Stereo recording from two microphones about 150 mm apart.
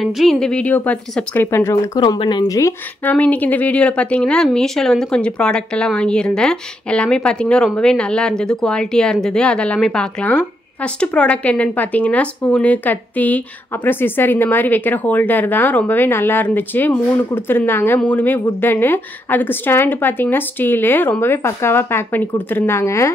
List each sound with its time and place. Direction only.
0.0 s a woman's voice: centre (ahead or behind); by 1.8 s 15° left (ahead or behind)
2.0 s speech: 30° left (ahead or behind)
3.1 s a woman's voice: 10° left (ahead or behind)